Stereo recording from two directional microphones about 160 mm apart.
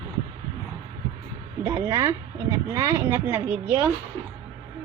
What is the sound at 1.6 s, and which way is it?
A woman's voice, 20° right (ahead or behind).